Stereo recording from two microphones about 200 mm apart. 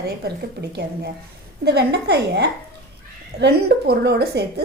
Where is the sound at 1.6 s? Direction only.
55° right (ahead or behind).